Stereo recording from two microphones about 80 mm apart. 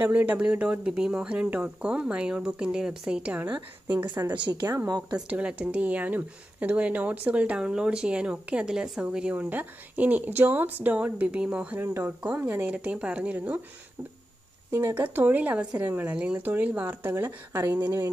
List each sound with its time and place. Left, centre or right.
0.0 s speech: right
4.5 s speech: right
5.3 s speech: centre
11.8 s speech: right
12.6 s speech: centre
14.7 s speech: right
15.0 s speech: right